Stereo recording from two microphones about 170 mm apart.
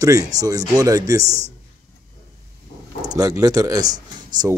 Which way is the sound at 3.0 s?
20° right (ahead or behind).